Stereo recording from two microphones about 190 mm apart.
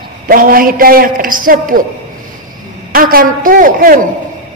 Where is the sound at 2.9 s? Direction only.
50° right (ahead or behind).